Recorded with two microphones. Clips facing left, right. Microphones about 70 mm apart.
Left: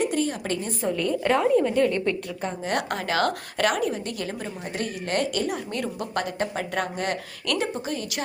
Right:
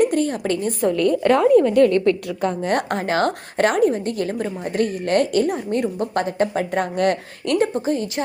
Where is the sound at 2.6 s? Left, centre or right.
Right.